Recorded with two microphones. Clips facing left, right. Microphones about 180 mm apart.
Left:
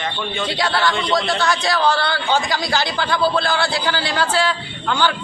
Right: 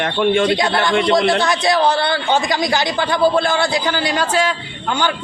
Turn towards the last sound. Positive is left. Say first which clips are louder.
# even
turn(degrees=-15)  # may be behind; listen again after turning